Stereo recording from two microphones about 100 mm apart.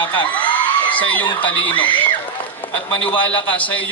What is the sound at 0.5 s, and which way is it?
Whoop, 15° left (ahead or behind).